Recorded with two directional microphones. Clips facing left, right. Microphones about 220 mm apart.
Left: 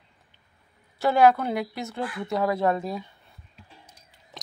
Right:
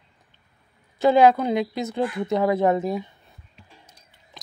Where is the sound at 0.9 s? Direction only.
20° right (ahead or behind).